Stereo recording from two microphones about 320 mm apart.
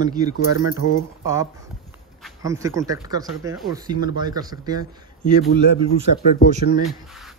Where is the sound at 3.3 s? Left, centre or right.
Centre.